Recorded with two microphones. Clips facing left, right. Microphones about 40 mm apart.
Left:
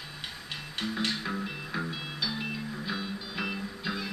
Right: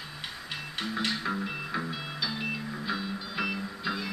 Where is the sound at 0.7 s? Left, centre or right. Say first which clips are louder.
Even; centre.